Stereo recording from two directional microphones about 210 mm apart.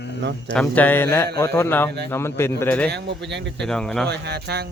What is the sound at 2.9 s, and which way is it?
Speech, 55° right (ahead or behind).